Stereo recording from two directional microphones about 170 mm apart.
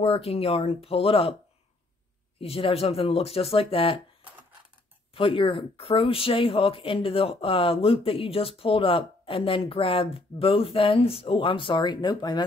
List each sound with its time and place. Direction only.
0.0 s speech: 35° left (ahead or behind)
2.4 s speech: 35° left (ahead or behind)
5.1 s speech: 30° left (ahead or behind)